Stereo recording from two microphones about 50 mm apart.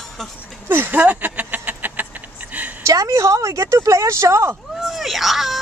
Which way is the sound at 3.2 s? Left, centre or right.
Right.